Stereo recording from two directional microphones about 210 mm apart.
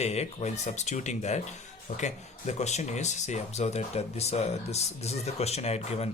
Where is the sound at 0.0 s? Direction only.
30° left (ahead or behind).